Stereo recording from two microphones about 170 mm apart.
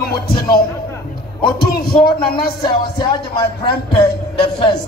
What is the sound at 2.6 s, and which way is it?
Speech, 30° left (ahead or behind).